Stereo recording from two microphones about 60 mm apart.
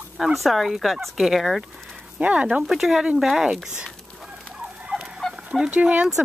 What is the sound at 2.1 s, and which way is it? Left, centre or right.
Speech, right.